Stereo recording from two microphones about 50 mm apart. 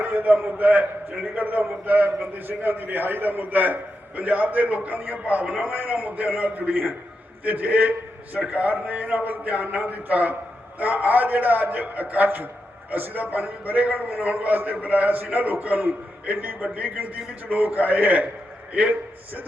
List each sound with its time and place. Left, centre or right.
0.0 s a man's voice: right